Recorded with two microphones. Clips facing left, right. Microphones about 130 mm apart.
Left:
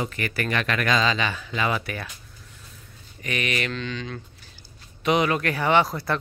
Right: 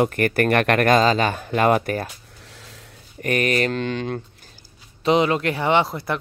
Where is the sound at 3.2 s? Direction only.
45° right (ahead or behind).